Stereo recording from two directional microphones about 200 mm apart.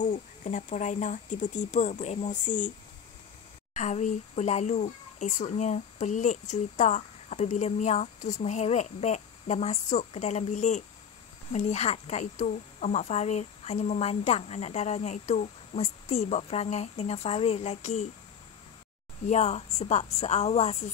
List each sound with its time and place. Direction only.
0.0 s speech: 40° left (ahead or behind)
3.7 s speech: 35° left (ahead or behind)
19.2 s speech: 35° left (ahead or behind)